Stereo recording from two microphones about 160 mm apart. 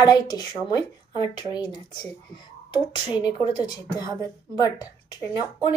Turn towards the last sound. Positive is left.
turn(degrees=25)  # may be behind; listen again after turning